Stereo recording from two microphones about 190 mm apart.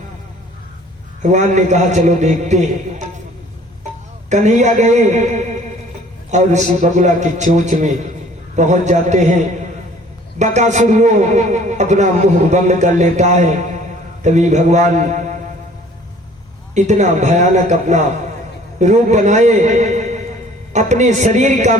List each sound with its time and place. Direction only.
1.2 s a man's voice: 40° right (ahead or behind)
4.3 s a man's voice: 40° right (ahead or behind)
16.7 s a man's voice: 40° right (ahead or behind)